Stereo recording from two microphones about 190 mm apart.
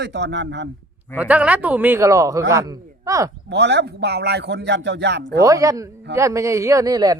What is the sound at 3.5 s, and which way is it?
Speech, 65° right (ahead or behind).